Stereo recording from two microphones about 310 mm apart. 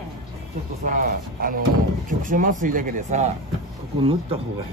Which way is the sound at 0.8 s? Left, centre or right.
Right.